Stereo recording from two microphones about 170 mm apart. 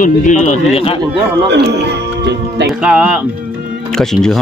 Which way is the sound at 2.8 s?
5° right (ahead or behind).